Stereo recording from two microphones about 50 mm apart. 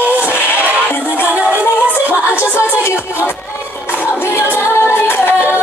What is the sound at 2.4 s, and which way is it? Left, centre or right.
Music, left.